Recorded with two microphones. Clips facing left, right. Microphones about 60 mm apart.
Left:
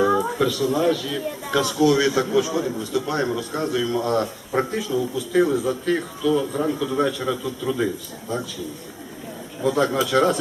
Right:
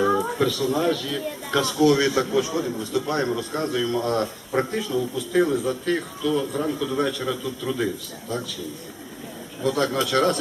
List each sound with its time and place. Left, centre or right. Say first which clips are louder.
0.0 s a man's voice: left 2 dB; centre
2.7 s a man's voice: left 1 dB; centre
9.6 s a man's voice: left 2 dB; centre